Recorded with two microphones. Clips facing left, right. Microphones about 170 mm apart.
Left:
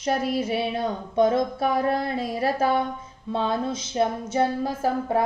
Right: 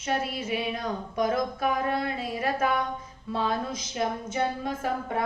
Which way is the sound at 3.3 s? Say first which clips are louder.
Left 3 dB; 25° left (ahead or behind).